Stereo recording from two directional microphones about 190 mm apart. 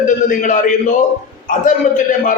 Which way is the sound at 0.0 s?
45° left (ahead or behind).